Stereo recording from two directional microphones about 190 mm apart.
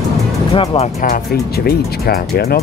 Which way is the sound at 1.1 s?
55° left (ahead or behind).